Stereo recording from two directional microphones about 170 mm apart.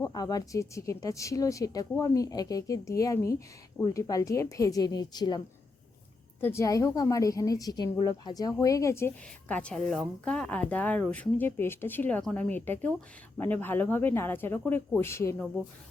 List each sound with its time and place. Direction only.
0.0 s a woman's voice: 20° left (ahead or behind)
6.4 s a woman's voice: 15° left (ahead or behind)